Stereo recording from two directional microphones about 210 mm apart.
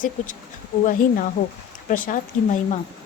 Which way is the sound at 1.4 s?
50° left (ahead or behind).